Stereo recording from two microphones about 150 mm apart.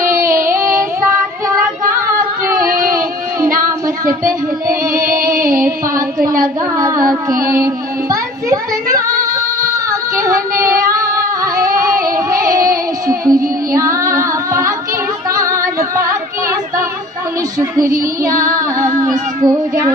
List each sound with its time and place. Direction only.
0.2 s child singing: 20° right (ahead or behind)
2.4 s a sound: 25° right (ahead or behind)
2.7 s a sound: 70° right (ahead or behind)
5.3 s music: 65° right (ahead or behind)
6.4 s child singing: 20° right (ahead or behind)
7.5 s a child's voice: 20° right (ahead or behind)
9.8 s child singing: 20° right (ahead or behind)
10.9 s female singing: 20° right (ahead or behind)
12.4 s child singing: 25° right (ahead or behind)
13.2 s music: 20° right (ahead or behind)
17.6 s child singing: 20° right (ahead or behind)